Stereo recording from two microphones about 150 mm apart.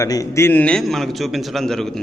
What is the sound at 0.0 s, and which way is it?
A man's voice, 20° left (ahead or behind).